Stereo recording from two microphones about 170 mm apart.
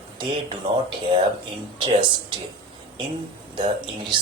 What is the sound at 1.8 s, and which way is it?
Speech, 30° right (ahead or behind).